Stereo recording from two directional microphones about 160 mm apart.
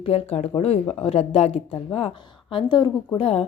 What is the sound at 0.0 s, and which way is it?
A woman's voice, 40° left (ahead or behind).